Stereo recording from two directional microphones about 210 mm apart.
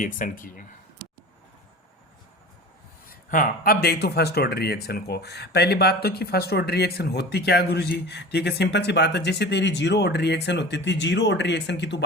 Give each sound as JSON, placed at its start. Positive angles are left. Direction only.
{"t": 0.0, "sound": "speech", "side_deg": 40}
{"t": 3.1, "sound": "a man's voice", "side_deg": 40}